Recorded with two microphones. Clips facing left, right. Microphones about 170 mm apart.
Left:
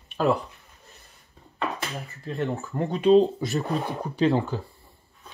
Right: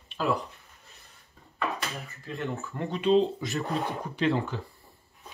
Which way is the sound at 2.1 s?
35° left (ahead or behind).